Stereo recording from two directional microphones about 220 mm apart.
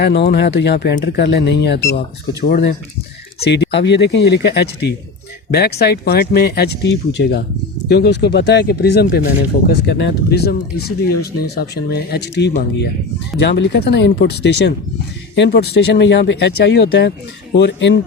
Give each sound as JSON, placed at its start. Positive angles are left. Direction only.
{"t": 0.0, "sound": "speech", "side_deg": 50}